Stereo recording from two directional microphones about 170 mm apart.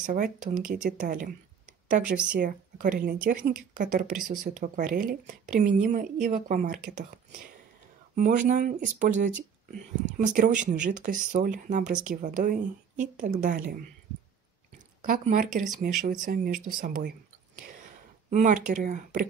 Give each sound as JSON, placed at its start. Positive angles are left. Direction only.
{"t": 0.0, "sound": "speech", "side_deg": -50}
{"t": 8.2, "sound": "speech", "side_deg": -50}
{"t": 15.0, "sound": "speech", "side_deg": -50}
{"t": 16.3, "sound": "speech", "side_deg": -60}
{"t": 18.3, "sound": "speech", "side_deg": -45}